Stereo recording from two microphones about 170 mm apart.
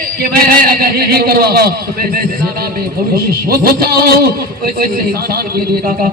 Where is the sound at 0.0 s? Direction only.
60° right (ahead or behind).